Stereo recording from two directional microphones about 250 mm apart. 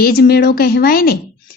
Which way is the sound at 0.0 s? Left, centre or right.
Left.